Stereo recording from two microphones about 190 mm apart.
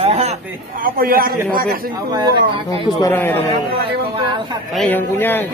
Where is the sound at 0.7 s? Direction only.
50° right (ahead or behind).